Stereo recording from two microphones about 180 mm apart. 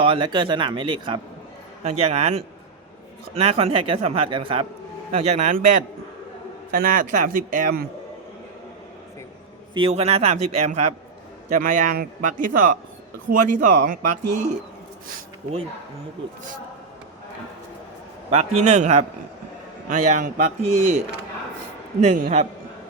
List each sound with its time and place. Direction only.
0.0 s speech: 30° right (ahead or behind)
5.1 s a man's voice: 40° right (ahead or behind)
9.7 s a man's voice: 30° right (ahead or behind); by 14.4 s 50° right (ahead or behind)
18.3 s a man's voice: 35° right (ahead or behind)
22.0 s speech: 40° right (ahead or behind)